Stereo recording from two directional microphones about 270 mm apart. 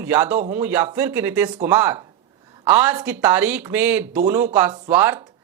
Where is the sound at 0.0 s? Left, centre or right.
Centre.